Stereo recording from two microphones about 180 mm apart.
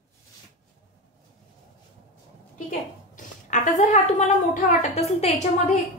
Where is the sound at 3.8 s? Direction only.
40° left (ahead or behind).